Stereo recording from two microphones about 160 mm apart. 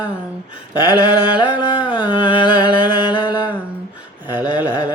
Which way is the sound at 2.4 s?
25° left (ahead or behind).